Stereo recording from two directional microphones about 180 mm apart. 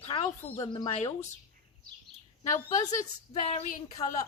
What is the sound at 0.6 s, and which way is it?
Speech, 25° left (ahead or behind).